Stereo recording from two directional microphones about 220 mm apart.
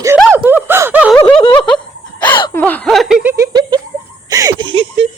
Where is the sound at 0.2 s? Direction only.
5° right (ahead or behind).